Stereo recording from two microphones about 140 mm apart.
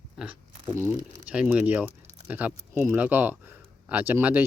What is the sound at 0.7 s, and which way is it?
Speech, 15° right (ahead or behind).